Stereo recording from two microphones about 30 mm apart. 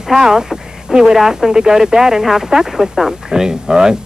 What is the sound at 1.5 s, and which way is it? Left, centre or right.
Speech, right.